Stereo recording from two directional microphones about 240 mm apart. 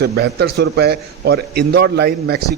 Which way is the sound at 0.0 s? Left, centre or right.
Right.